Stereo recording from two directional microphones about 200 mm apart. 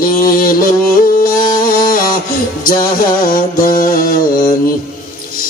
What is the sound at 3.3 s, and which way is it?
Mantra, 45° left (ahead or behind).